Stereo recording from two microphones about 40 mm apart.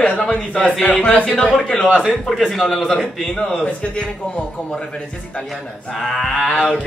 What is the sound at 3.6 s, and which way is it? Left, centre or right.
Speech, left.